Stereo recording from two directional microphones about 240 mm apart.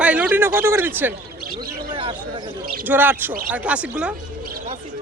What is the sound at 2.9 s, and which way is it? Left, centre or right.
A man's voice, centre.